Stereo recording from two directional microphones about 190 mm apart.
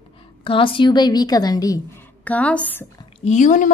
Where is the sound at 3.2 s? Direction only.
40° left (ahead or behind).